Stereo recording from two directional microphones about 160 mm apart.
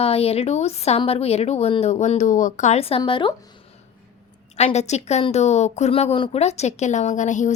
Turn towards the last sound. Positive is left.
turn(degrees=50)  # may be behind; listen again after turning